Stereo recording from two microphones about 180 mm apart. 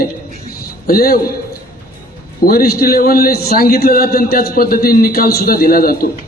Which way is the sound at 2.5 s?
55° left (ahead or behind).